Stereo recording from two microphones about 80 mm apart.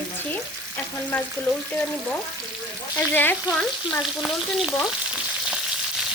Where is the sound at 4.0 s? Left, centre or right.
Centre.